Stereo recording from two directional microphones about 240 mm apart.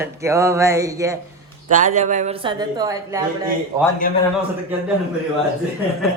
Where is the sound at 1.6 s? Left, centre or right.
Right; by 3.3 s centre.